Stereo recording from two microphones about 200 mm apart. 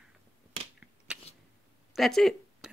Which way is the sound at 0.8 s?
5° right (ahead or behind).